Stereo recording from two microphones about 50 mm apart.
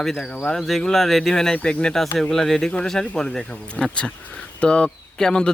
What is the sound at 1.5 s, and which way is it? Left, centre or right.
Speech, left.